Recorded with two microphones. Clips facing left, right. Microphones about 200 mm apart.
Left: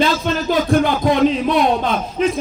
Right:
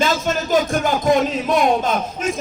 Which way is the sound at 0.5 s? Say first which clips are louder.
Left 2 dB; 45° right (ahead or behind).